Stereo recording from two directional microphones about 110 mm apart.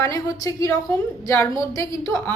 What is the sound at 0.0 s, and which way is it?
A woman's voice, 30° left (ahead or behind).